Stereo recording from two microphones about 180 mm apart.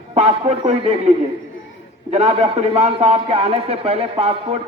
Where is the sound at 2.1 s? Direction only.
35° right (ahead or behind).